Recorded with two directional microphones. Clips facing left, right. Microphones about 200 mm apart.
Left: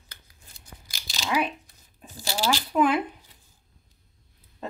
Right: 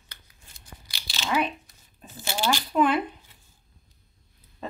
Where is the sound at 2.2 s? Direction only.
35° left (ahead or behind).